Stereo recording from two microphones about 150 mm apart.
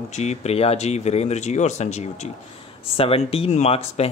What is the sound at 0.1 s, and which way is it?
Speech, 50° left (ahead or behind).